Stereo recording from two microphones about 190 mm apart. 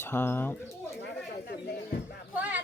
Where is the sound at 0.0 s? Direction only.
10° left (ahead or behind).